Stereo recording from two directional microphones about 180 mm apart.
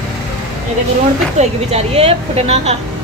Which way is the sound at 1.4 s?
35° right (ahead or behind).